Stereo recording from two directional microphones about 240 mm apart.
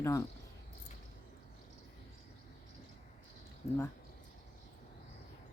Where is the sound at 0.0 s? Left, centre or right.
Centre.